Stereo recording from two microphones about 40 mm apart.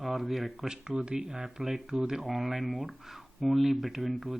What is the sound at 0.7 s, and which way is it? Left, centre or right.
Speech, centre.